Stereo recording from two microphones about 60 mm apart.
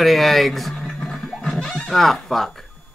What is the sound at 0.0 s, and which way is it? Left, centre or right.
Speech, centre.